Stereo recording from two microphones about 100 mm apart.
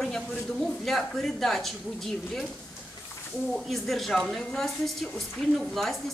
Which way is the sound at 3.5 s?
Centre (ahead or behind).